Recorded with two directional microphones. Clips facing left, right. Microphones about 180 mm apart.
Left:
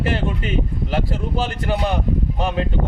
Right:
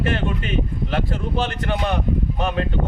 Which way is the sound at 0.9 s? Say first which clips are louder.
Left 1 dB; 10° left (ahead or behind).